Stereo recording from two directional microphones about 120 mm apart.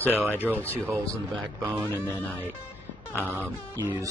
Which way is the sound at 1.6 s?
15° right (ahead or behind).